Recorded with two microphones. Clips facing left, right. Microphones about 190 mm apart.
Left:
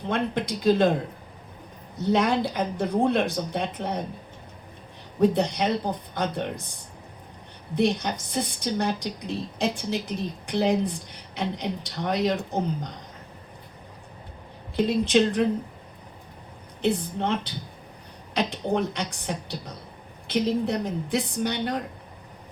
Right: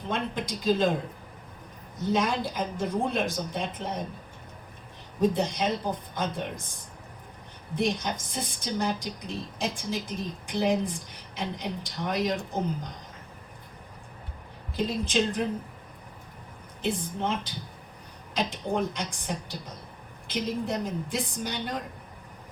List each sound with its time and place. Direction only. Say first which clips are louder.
0.1 s a woman's voice: left 5 dB; 65° left (ahead or behind)
2.0 s a woman's voice: left 4 dB; 65° left (ahead or behind)
5.2 s a woman's voice: left 3 dB; 65° left (ahead or behind)
7.8 s a woman's voice: left 4 dB; 65° left (ahead or behind)
14.8 s a woman's voice: left 7 dB; 70° left (ahead or behind)
16.8 s a woman's voice: left 4 dB; 65° left (ahead or behind)